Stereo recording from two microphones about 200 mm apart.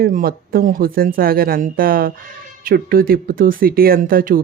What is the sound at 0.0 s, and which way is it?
Speech, 45° right (ahead or behind).